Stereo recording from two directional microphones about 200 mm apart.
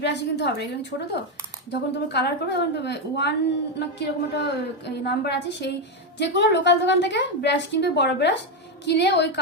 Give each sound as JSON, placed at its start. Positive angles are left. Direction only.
{"t": 0.0, "sound": "a woman's voice", "side_deg": 60}